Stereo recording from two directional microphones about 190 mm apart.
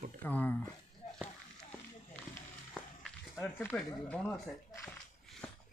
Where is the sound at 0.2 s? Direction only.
10° left (ahead or behind).